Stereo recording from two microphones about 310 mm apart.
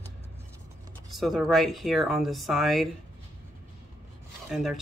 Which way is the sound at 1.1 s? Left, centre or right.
Centre.